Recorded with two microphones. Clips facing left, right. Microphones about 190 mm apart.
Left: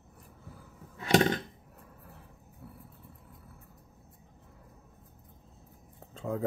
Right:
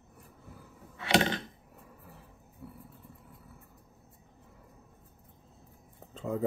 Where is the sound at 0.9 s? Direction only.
45° left (ahead or behind).